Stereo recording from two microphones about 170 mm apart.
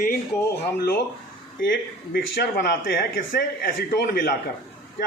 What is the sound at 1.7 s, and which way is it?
Speech, 60° left (ahead or behind).